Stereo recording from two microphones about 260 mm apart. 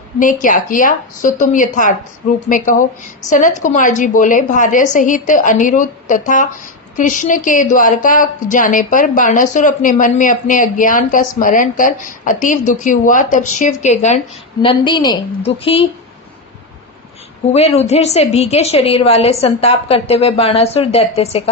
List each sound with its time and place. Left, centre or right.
0.4 s speech: left
17.5 s speech: left